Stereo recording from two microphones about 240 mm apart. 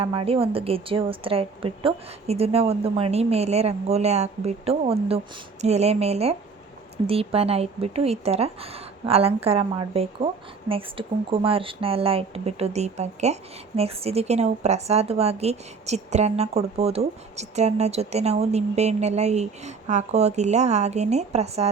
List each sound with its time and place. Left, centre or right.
0.0 s speech: right